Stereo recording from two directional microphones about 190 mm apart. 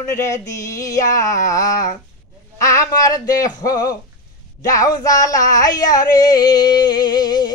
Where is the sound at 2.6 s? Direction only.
15° left (ahead or behind).